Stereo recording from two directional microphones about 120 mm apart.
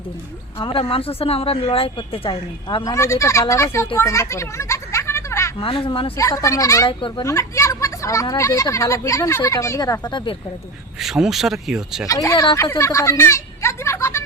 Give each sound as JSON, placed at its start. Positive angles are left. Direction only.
{"t": 0.6, "sound": "speech", "side_deg": 50}
{"t": 2.8, "sound": "speech", "side_deg": 25}
{"t": 5.5, "sound": "speech", "side_deg": 45}
{"t": 6.1, "sound": "speech", "side_deg": 25}
{"t": 11.0, "sound": "speech", "side_deg": -5}
{"t": 12.0, "sound": "speech", "side_deg": 30}
{"t": 12.5, "sound": "a sound", "side_deg": 25}